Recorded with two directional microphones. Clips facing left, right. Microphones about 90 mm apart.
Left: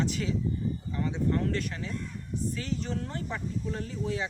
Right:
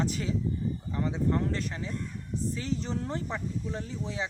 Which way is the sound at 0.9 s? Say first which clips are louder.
Right 1 dB; 25° right (ahead or behind).